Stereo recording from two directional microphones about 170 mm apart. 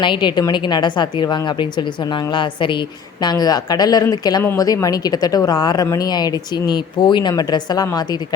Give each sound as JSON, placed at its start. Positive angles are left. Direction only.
{"t": 0.0, "sound": "a woman's voice", "side_deg": 25}